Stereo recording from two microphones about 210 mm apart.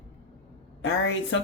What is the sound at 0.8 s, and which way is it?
Speech, 65° left (ahead or behind).